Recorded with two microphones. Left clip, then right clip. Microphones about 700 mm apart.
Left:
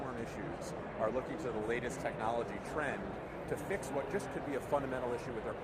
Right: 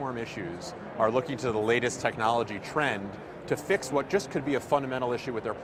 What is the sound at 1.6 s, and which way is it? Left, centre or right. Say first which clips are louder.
Speech: right 13 dB; right.